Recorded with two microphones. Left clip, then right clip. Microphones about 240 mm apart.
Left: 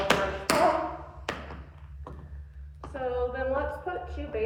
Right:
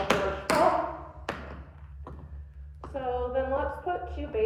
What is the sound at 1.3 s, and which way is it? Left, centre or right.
Thump, centre.